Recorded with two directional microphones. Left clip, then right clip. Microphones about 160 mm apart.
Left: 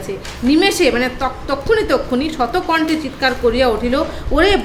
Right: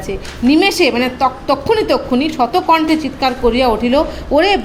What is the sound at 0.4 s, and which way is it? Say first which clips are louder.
A woman's voice: right 2 dB; 15° right (ahead or behind).